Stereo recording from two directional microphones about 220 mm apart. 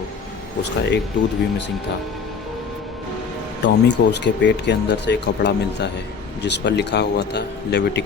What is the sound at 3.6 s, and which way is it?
Speech, 55° left (ahead or behind).